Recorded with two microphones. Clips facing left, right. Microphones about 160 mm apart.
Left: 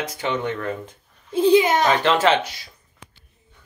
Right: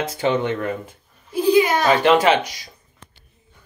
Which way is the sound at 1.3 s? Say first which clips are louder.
Left 1 dB; 25° left (ahead or behind).